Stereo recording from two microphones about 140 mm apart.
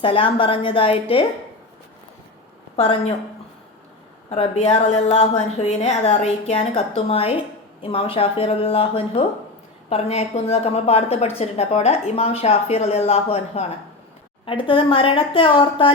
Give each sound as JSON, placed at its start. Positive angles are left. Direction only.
{"t": 0.0, "sound": "a woman's voice", "side_deg": 40}
{"t": 2.7, "sound": "a woman's voice", "side_deg": 50}
{"t": 4.3, "sound": "a woman's voice", "side_deg": 50}